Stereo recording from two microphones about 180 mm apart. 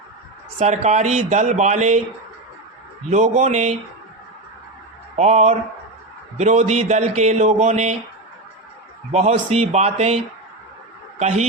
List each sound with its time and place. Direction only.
0.6 s speech: 40° right (ahead or behind)
3.1 s speech: 40° right (ahead or behind)
5.1 s speech: 40° right (ahead or behind)
9.1 s speech: 40° right (ahead or behind)
11.2 s speech: 40° right (ahead or behind)